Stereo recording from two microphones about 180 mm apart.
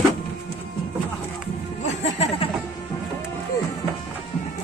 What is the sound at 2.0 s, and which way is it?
Music, 35° left (ahead or behind).